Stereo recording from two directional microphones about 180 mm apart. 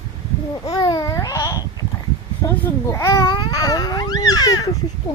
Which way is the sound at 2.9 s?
15° left (ahead or behind).